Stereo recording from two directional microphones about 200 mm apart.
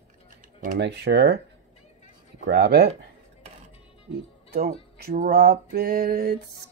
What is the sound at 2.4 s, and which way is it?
Speech, 55° right (ahead or behind).